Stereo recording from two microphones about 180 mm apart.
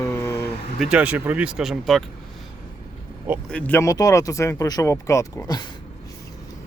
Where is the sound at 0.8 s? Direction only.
5° right (ahead or behind).